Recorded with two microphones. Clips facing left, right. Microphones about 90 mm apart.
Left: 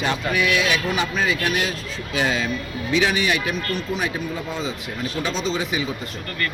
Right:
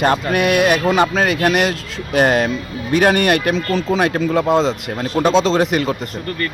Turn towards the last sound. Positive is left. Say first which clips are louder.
# right 8 dB
turn(degrees=-70)  # may be behind; listen again after turning